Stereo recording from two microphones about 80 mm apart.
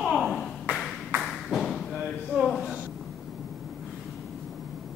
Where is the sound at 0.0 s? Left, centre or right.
Centre.